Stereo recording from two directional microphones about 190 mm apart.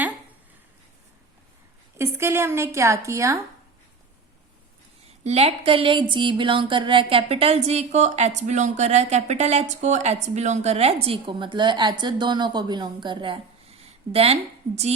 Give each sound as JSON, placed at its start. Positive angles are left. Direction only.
{"t": 2.0, "sound": "a woman's voice", "side_deg": -15}
{"t": 5.2, "sound": "speech", "side_deg": -35}